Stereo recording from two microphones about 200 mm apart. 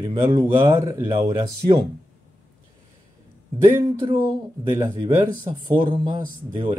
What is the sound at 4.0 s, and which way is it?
Speech, 20° right (ahead or behind).